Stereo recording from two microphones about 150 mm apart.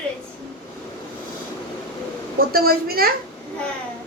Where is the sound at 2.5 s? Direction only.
85° right.